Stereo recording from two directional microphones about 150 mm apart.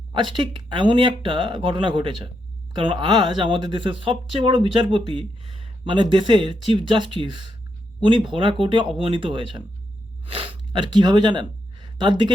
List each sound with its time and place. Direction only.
0.1 s speech: 35° right (ahead or behind)